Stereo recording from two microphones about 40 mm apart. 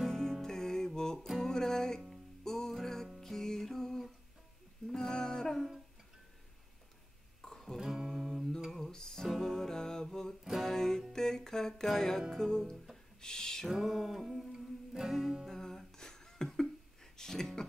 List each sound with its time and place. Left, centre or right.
0.1 s music: centre
7.4 s music: centre
7.8 s music: centre
8.7 s music: centre
13.7 s music: centre
15.4 s a sound: centre